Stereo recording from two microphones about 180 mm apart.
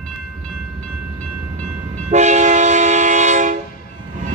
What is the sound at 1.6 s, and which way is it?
Train, 40° right (ahead or behind).